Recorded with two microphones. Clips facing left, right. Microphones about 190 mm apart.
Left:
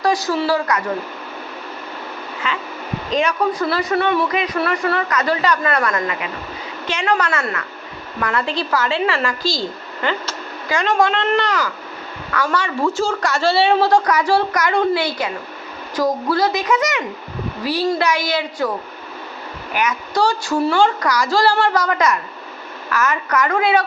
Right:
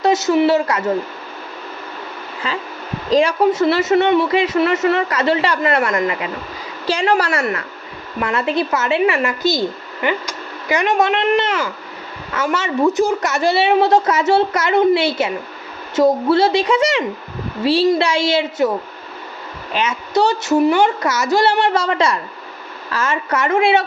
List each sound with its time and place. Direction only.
0.0 s speech: 25° right (ahead or behind)
2.4 s a woman's voice: 35° right (ahead or behind)
19.7 s speech: 25° right (ahead or behind)